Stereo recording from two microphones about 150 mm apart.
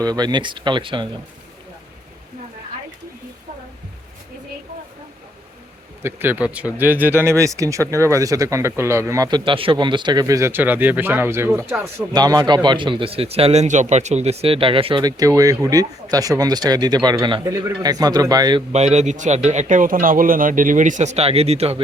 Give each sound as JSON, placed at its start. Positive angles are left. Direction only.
{"t": 0.0, "sound": "a man's voice", "side_deg": -30}
{"t": 6.0, "sound": "speech", "side_deg": -15}
{"t": 12.1, "sound": "a man's voice", "side_deg": -25}
{"t": 15.0, "sound": "speech", "side_deg": -25}
{"t": 18.7, "sound": "a man's voice", "side_deg": -50}